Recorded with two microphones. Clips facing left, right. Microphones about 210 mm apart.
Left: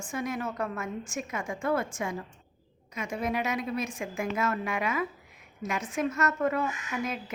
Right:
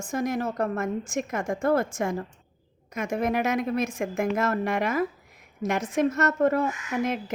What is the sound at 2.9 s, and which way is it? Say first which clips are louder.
A woman's voice: right 5 dB; 45° right (ahead or behind).